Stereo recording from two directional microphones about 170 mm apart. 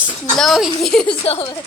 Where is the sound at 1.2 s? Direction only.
35° left (ahead or behind).